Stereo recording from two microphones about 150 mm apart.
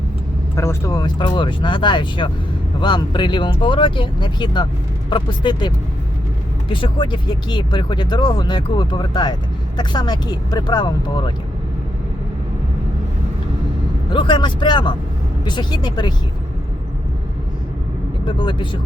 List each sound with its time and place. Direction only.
0.5 s speech: 20° left (ahead or behind)
14.1 s speech: 30° left (ahead or behind)
18.3 s speech: 35° left (ahead or behind)